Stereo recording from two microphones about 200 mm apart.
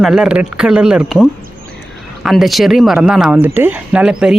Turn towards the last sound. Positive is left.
turn(degrees=-5)  # may be behind; listen again after turning